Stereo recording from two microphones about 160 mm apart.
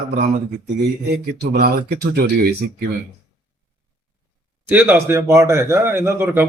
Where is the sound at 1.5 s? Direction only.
75° right (ahead or behind).